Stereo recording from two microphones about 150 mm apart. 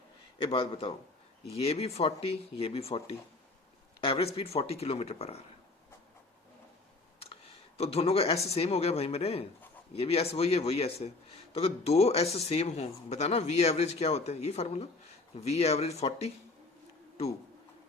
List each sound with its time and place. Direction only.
0.3 s speech: 35° left (ahead or behind)
7.8 s speech: 45° left (ahead or behind)